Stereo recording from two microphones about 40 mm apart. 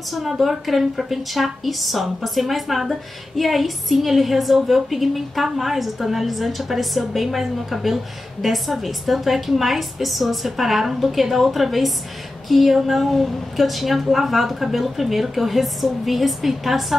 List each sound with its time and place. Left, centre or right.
0.1 s a woman's voice: centre